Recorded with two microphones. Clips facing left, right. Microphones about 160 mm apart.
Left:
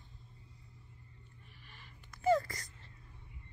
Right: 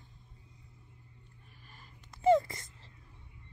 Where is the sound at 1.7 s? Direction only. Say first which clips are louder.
Right 2 dB; 40° right (ahead or behind).